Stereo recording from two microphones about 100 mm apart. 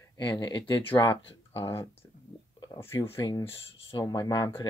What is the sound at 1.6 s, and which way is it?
Speech, 35° left (ahead or behind).